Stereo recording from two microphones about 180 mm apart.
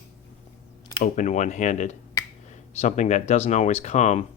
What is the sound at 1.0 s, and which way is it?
Speech, 45° left (ahead or behind).